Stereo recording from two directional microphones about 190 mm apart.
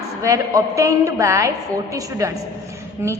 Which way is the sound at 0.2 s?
15° right (ahead or behind).